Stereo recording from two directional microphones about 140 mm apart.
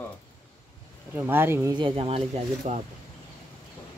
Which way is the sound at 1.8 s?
40° right (ahead or behind).